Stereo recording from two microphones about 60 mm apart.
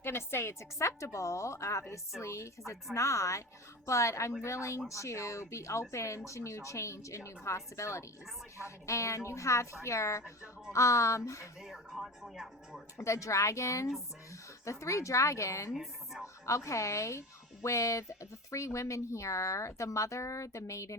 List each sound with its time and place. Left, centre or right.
0.0 s a woman's voice: left
11.6 s speech: centre
13.0 s speech: left
15.7 s speech: centre
16.2 s speech: left